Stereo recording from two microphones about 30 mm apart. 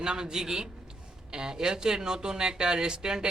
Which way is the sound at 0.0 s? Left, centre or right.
Right.